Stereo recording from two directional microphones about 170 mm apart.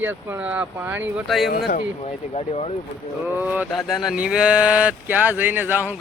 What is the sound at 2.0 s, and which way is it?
Speech, 40° left (ahead or behind).